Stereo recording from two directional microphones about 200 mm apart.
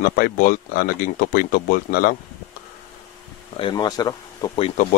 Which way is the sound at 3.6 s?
20° left (ahead or behind).